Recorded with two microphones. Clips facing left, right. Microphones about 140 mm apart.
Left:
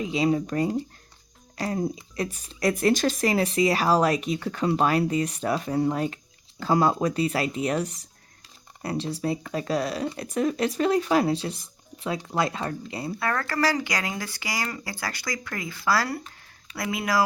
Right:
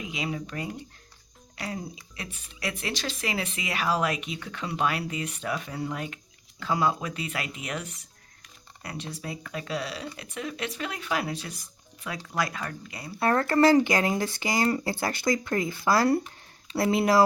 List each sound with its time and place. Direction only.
0.0 s speech: 35° left (ahead or behind)
13.1 s speech: 25° right (ahead or behind)